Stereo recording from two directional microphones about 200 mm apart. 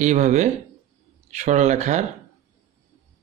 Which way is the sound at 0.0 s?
35° right (ahead or behind).